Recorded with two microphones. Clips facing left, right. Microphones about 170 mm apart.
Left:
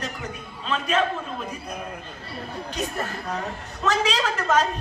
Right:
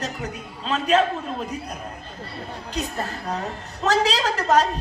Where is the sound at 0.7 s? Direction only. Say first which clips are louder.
Right 4 dB; 40° right (ahead or behind).